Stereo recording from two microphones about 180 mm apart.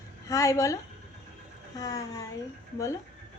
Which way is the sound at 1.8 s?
20° left (ahead or behind).